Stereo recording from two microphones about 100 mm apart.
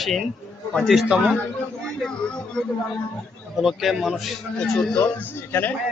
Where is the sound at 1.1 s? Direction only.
10° right (ahead or behind).